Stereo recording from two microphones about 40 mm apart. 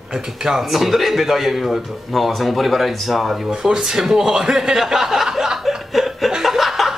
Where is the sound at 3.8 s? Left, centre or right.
Centre.